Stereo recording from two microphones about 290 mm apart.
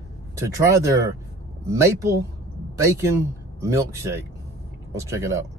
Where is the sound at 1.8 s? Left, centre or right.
Centre.